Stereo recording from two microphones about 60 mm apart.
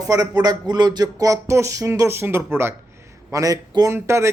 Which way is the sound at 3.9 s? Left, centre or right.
Right.